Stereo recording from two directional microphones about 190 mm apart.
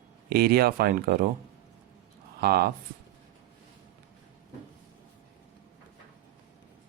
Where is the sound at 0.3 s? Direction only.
55° right (ahead or behind).